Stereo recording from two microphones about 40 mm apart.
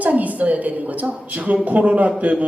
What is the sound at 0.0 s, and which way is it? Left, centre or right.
A woman's voice, right.